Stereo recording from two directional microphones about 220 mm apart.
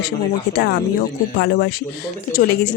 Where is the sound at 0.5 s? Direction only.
45° left (ahead or behind).